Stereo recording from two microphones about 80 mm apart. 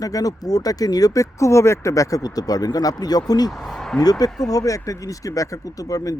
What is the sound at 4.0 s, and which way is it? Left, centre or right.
Speech, left.